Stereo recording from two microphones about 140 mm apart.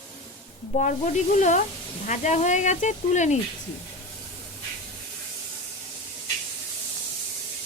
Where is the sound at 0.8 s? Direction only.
65° left (ahead or behind).